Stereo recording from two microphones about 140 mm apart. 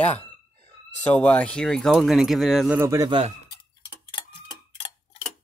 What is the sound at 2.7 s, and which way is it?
Speech, 20° right (ahead or behind).